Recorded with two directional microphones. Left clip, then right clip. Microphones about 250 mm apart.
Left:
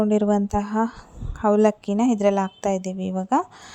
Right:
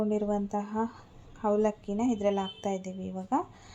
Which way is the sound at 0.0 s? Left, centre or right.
Left.